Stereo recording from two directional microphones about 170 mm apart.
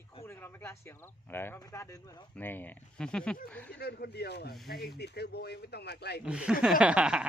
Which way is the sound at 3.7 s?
70° left (ahead or behind).